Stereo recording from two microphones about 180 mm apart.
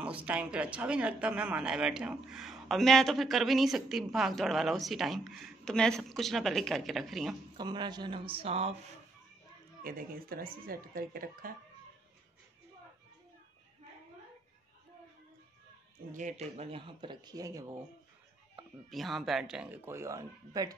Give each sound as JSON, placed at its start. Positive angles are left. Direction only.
{"t": 0.0, "sound": "speech", "side_deg": -5}
{"t": 7.5, "sound": "speech", "side_deg": -25}
{"t": 9.8, "sound": "speech", "side_deg": -55}
{"t": 16.1, "sound": "speech", "side_deg": -45}
{"t": 18.6, "sound": "speech", "side_deg": 0}